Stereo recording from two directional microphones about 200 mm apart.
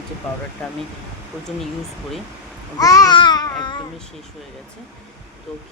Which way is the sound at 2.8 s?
15° left (ahead or behind).